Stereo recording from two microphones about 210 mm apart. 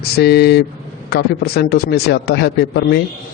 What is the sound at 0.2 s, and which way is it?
Speech, 50° left (ahead or behind).